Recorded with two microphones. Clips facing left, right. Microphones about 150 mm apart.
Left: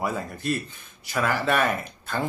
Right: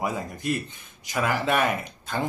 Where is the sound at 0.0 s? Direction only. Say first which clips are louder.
Even; 15° right (ahead or behind).